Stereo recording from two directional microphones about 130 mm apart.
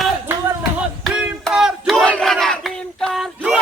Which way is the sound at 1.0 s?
5° right (ahead or behind).